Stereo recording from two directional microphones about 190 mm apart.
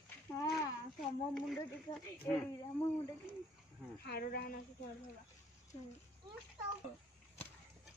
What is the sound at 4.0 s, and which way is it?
Speech, 55° left (ahead or behind).